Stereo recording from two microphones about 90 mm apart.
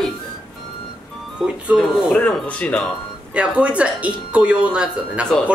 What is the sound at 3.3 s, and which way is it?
Speech, 15° right (ahead or behind).